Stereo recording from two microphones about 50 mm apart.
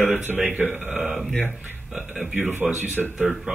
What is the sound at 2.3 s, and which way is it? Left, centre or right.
Speech, right.